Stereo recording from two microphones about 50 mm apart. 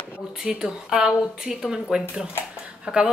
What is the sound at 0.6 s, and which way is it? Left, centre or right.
Speech, centre.